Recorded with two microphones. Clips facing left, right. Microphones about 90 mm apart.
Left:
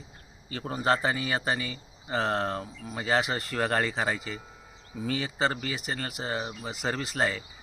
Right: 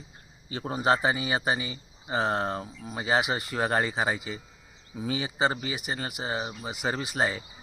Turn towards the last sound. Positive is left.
turn(degrees=-10)  # may be behind; listen again after turning